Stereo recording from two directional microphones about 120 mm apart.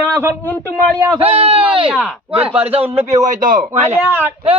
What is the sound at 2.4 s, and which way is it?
Speech, 15° right (ahead or behind).